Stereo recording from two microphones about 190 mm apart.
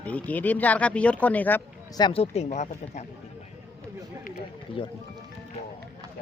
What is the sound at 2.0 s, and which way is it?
Speech, 25° left (ahead or behind).